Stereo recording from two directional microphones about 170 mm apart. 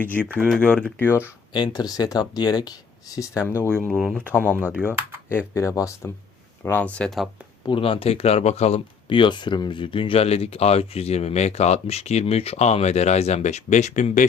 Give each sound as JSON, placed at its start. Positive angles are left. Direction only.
{"t": 0.0, "sound": "speech", "side_deg": 10}
{"t": 1.5, "sound": "speech", "side_deg": 25}
{"t": 3.8, "sound": "speech", "side_deg": 5}
{"t": 4.8, "sound": "speech", "side_deg": -10}
{"t": 5.5, "sound": "speech", "side_deg": 20}
{"t": 7.6, "sound": "speech", "side_deg": 30}